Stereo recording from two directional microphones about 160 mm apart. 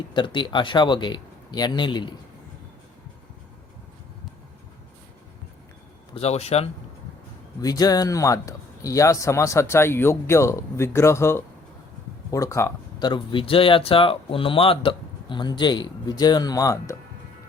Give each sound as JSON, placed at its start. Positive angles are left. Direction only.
{"t": 0.1, "sound": "speech", "side_deg": 30}
{"t": 6.1, "sound": "speech", "side_deg": 40}
{"t": 7.6, "sound": "speech", "side_deg": 25}